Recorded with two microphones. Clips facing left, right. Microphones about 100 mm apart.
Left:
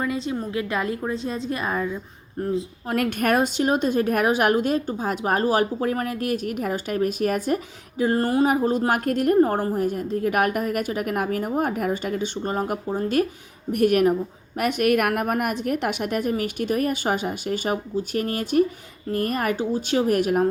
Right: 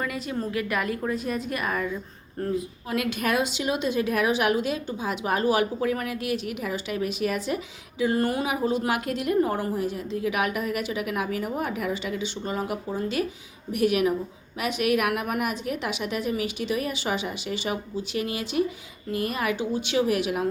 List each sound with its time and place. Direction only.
0.0 s a woman's voice: 25° left (ahead or behind)
2.8 s a woman's voice: 45° left (ahead or behind)